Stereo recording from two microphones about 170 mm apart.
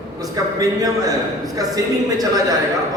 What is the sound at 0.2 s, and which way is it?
A man's voice, 20° right (ahead or behind).